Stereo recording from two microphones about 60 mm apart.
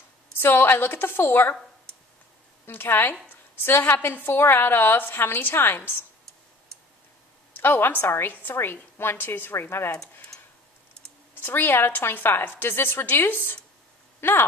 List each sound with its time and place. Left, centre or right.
0.4 s a woman's voice: left
2.6 s a woman's voice: left
7.5 s a woman's voice: left
11.4 s a woman's voice: left